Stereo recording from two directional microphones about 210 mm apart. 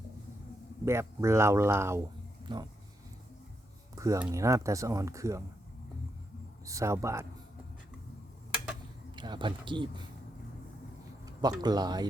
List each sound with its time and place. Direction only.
0.9 s speech: 15° right (ahead or behind)
3.9 s speech: 15° right (ahead or behind)
6.7 s speech: 15° right (ahead or behind)
9.1 s speech: 20° right (ahead or behind)
11.3 s speech: 20° right (ahead or behind)